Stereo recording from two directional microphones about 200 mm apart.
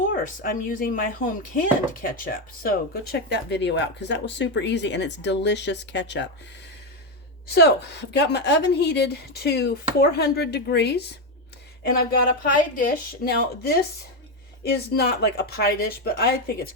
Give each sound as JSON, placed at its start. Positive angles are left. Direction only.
{"t": 0.1, "sound": "speech", "side_deg": 45}
{"t": 7.4, "sound": "speech", "side_deg": 55}